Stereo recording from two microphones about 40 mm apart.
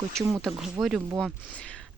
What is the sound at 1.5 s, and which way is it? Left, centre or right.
Speech, left.